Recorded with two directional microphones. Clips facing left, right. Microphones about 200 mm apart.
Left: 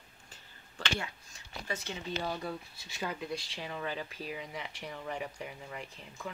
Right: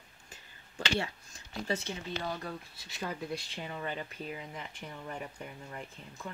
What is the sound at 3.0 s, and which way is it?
Speech, centre (ahead or behind).